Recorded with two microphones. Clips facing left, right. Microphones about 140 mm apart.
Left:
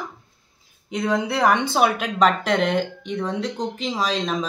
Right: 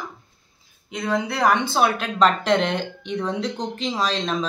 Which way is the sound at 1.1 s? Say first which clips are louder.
Even; 10° left (ahead or behind).